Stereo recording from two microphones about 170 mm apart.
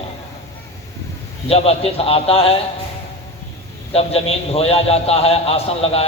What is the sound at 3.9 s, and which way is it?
A man's voice, 35° left (ahead or behind).